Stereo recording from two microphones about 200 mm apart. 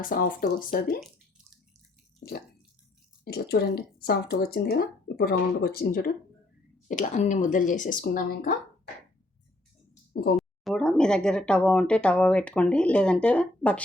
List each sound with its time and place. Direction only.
0.0 s speech: 45° left (ahead or behind)
2.2 s water: 45° left (ahead or behind)
3.5 s speech: 55° left (ahead or behind)
10.3 s speech: centre (ahead or behind)